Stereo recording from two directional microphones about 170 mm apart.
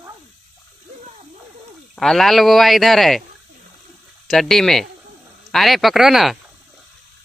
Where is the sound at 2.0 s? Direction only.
Centre (ahead or behind).